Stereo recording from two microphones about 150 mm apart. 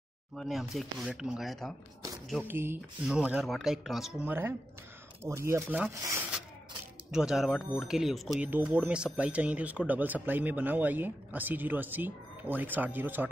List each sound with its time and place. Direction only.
0.4 s speech: centre (ahead or behind)
2.4 s speech: 15° right (ahead or behind)
7.1 s speech: 5° right (ahead or behind)